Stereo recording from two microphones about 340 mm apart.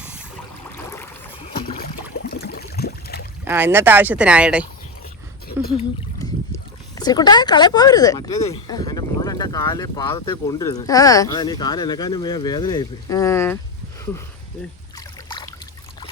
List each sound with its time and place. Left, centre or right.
0.9 s boat: centre
2.3 s a sound: left
3.4 s speech: centre
6.1 s speech: centre
14.9 s boat: centre